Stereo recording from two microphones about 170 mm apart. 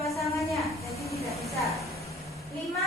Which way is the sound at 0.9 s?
20° left (ahead or behind).